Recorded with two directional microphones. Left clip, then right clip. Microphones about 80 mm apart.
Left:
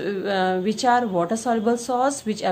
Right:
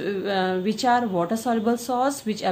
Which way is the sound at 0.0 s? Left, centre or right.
Left.